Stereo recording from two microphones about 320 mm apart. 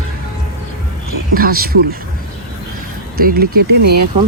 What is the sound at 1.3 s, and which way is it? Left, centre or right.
Speech, right.